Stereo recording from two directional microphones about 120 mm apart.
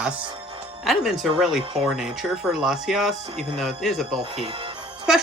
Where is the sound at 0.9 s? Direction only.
Centre (ahead or behind).